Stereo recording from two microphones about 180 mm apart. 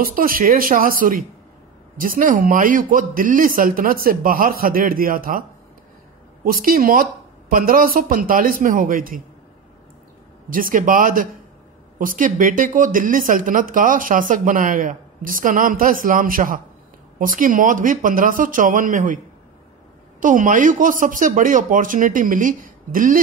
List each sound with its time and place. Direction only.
0.0 s speech: 55° right (ahead or behind)
6.4 s speech: 55° right (ahead or behind)
10.5 s speech: 50° right (ahead or behind)
20.2 s speech: 45° right (ahead or behind)